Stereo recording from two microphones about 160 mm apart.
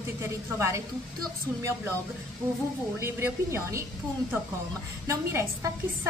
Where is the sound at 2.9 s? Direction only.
15° right (ahead or behind).